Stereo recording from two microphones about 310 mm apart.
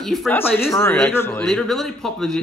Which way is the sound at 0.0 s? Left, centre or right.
Centre.